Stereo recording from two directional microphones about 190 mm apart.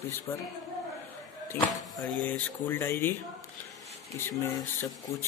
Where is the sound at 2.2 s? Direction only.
10° left (ahead or behind).